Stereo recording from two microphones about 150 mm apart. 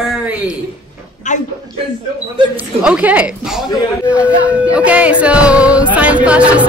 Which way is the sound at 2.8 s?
10° right (ahead or behind).